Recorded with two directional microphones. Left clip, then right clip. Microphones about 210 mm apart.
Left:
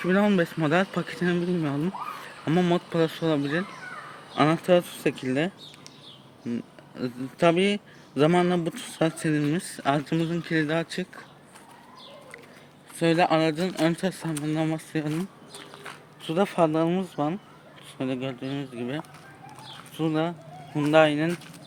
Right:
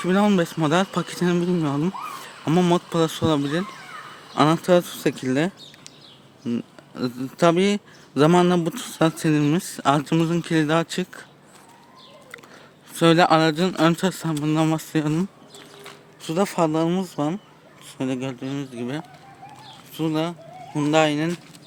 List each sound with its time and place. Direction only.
0.0 s a man's voice: 20° right (ahead or behind)
6.5 s a man's voice: 30° right (ahead or behind)
9.6 s a man's voice: 35° right (ahead or behind)
13.0 s a man's voice: 35° right (ahead or behind)
16.2 s speech: 25° right (ahead or behind)